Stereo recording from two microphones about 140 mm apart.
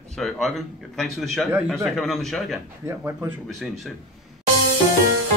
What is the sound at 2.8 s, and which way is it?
Speech, 20° right (ahead or behind).